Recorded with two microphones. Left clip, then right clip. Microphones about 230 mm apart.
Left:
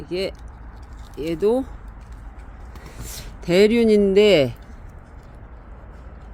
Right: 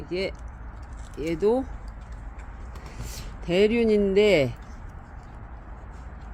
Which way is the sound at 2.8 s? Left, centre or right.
Left.